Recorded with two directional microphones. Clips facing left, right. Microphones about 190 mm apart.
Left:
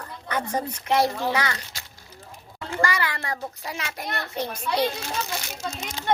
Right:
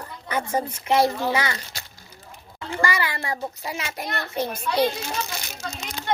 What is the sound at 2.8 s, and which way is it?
A child's voice, 10° right (ahead or behind).